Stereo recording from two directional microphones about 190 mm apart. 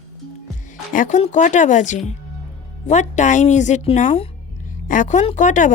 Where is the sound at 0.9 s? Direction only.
45° left (ahead or behind).